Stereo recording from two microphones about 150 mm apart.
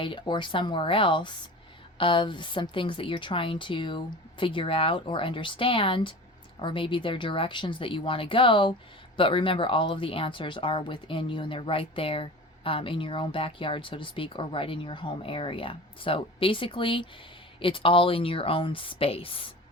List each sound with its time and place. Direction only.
0.0 s speech: 30° left (ahead or behind)